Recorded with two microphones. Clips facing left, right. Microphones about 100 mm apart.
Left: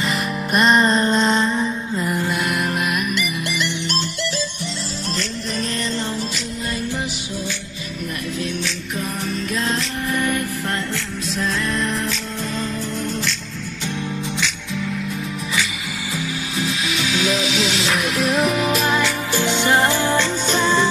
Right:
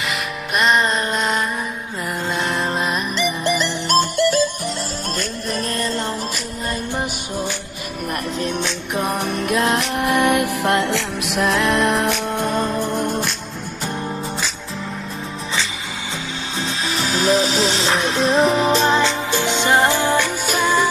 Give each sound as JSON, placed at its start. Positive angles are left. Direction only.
{"t": 0.5, "sound": "music", "side_deg": 0}
{"t": 8.4, "sound": "music", "side_deg": -55}
{"t": 16.5, "sound": "music", "side_deg": -30}